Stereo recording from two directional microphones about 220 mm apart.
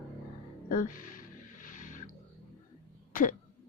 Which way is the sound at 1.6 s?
35° left (ahead or behind).